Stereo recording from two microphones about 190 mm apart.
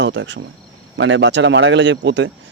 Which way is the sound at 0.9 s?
85° right.